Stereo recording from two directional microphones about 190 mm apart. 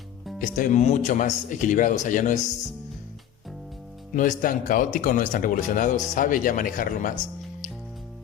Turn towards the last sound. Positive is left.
turn(degrees=45)  # may be behind; listen again after turning